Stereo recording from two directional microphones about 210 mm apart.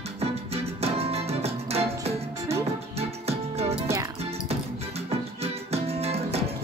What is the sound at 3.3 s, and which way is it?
Music, 30° right (ahead or behind).